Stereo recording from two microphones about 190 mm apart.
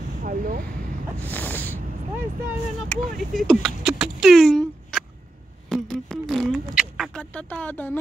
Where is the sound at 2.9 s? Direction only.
Centre (ahead or behind).